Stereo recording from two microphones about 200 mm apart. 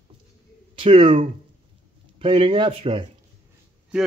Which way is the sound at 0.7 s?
25° right (ahead or behind).